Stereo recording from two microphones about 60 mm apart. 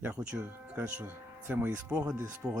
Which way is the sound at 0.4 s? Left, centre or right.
Right.